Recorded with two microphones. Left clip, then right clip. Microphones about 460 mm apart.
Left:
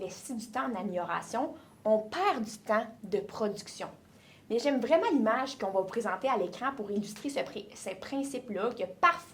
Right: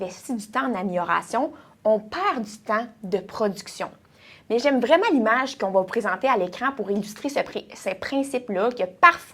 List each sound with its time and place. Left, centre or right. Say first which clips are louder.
0.0 s speech: right 9 dB; right
1.8 s a woman's voice: right 6 dB; right